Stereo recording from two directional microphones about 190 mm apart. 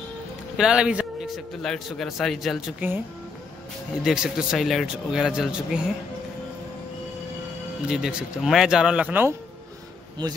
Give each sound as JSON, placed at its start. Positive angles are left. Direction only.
{"t": 0.6, "sound": "a man's voice", "side_deg": -5}
{"t": 4.0, "sound": "a man's voice", "side_deg": -5}
{"t": 7.9, "sound": "a man's voice", "side_deg": -5}